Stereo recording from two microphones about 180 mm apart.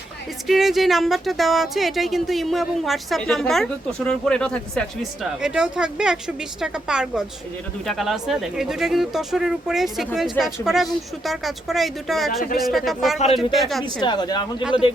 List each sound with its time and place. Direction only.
0.4 s speech: centre (ahead or behind)
13.8 s speech: 25° left (ahead or behind)